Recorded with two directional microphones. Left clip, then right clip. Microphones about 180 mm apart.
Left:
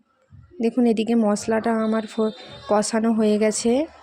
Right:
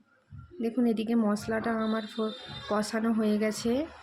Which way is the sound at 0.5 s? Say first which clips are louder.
Left 9 dB; 40° left (ahead or behind).